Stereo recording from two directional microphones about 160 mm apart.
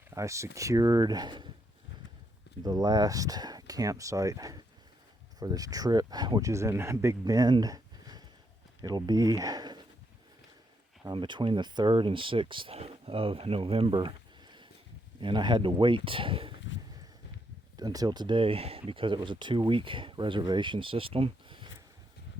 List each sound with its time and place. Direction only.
0.1 s speech: 20° right (ahead or behind)
2.6 s speech: 25° right (ahead or behind)
11.1 s speech: 30° right (ahead or behind)
15.2 s speech: 30° right (ahead or behind)
17.7 s speech: 25° right (ahead or behind)